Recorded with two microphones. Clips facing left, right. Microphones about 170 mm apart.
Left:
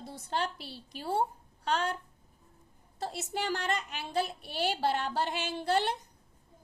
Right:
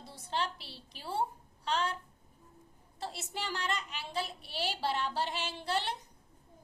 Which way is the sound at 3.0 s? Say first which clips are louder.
Left 5 dB; 45° left (ahead or behind).